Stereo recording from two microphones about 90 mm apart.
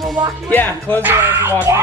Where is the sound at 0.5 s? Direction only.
20° left (ahead or behind).